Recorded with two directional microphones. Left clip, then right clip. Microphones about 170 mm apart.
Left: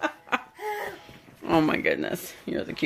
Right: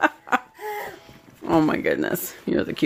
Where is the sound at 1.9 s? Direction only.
40° right (ahead or behind).